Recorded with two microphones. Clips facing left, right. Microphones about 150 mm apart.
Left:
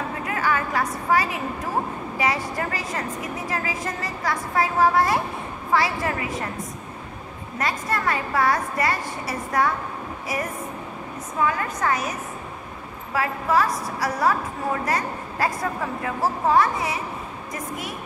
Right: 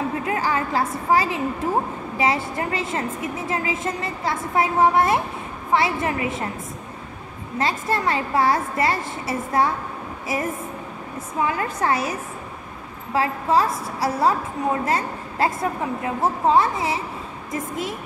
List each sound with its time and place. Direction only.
0.2 s a sound: 25° right (ahead or behind)
2.1 s a woman's voice: 25° right (ahead or behind)
7.5 s a woman's voice: 25° right (ahead or behind)
13.1 s a woman's voice: 25° right (ahead or behind)